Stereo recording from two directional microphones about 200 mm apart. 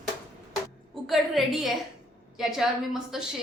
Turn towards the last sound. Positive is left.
turn(degrees=0)  # may be behind; listen again after turning